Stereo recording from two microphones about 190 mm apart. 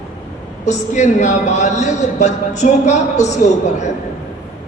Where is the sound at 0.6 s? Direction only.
40° left (ahead or behind).